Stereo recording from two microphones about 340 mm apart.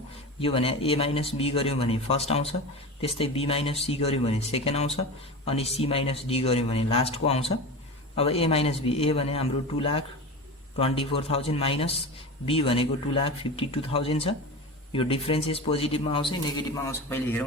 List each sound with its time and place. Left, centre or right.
0.3 s speech: centre